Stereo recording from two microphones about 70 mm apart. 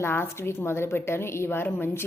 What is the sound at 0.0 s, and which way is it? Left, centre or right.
A woman's voice, left.